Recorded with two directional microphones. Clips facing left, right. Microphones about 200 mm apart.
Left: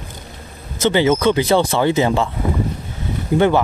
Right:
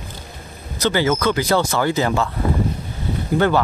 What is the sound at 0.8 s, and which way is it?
Speech, 20° left (ahead or behind).